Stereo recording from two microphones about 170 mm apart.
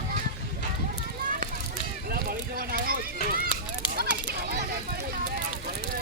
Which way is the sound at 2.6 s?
60° right (ahead or behind).